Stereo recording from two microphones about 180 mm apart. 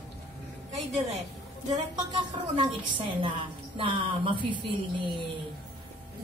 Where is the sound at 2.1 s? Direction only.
25° right (ahead or behind).